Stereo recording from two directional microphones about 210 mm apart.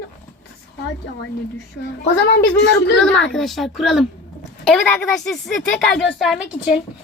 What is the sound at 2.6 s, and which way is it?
Speech, 60° left (ahead or behind).